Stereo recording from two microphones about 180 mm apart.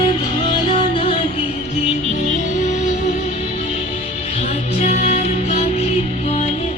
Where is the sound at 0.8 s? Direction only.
30° left (ahead or behind).